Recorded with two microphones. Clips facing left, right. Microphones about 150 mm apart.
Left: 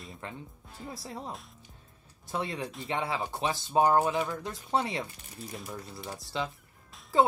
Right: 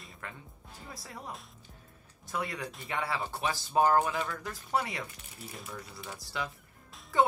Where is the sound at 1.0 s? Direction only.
25° left (ahead or behind).